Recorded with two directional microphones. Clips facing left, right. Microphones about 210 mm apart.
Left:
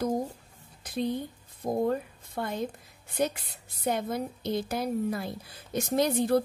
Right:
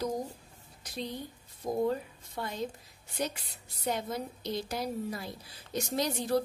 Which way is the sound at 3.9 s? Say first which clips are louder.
Left 4 dB; 55° left (ahead or behind).